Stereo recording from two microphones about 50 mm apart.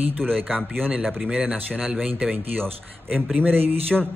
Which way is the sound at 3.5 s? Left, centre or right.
Right.